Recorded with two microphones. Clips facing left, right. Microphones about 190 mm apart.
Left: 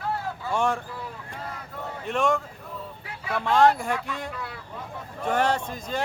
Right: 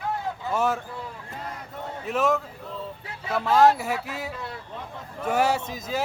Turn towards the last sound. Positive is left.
turn(degrees=-5)  # may be behind; listen again after turning